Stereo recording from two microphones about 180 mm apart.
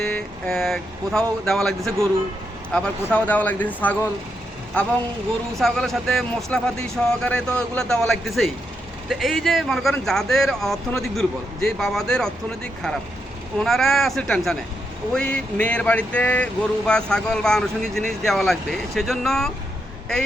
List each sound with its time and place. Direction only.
0.0 s speech: 5° left (ahead or behind)
5.5 s speech: centre (ahead or behind)